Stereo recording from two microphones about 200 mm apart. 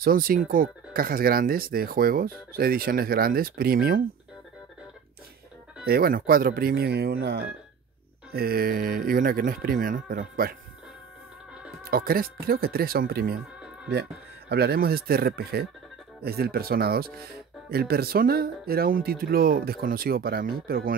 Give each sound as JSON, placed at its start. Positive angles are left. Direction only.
{"t": 0.0, "sound": "speech", "side_deg": -45}
{"t": 5.9, "sound": "speech", "side_deg": -50}
{"t": 11.8, "sound": "speech", "side_deg": -50}